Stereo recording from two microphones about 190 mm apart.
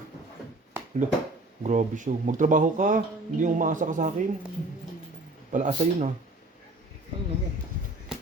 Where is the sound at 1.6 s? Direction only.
40° right (ahead or behind).